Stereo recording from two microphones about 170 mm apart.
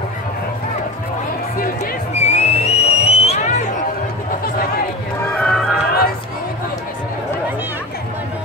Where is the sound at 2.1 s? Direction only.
40° left (ahead or behind).